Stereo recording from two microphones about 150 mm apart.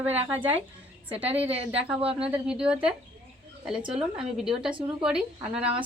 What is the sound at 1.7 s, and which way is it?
Speech, 10° right (ahead or behind).